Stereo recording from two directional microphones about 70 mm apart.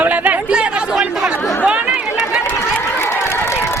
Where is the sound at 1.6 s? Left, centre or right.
Centre.